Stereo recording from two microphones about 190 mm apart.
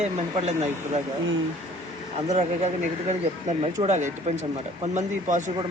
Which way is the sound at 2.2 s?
35° right (ahead or behind).